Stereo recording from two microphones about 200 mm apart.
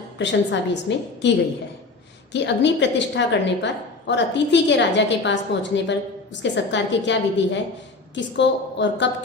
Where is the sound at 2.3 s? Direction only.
60° left (ahead or behind).